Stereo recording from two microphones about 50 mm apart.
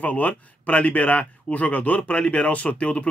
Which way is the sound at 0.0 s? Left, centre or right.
Left.